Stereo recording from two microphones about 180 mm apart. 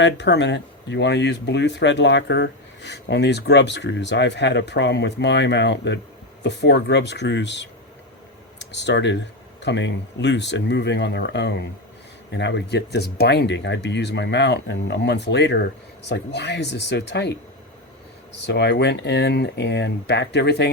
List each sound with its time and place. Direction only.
0.0 s speech: 75° left (ahead or behind)
18.4 s speech: 70° left (ahead or behind)